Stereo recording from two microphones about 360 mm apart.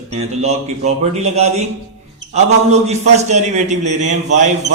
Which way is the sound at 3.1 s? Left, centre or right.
Centre.